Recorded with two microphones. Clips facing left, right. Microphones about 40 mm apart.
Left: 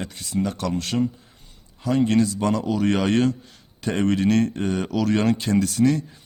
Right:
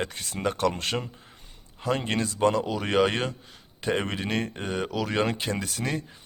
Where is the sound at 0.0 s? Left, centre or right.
Right.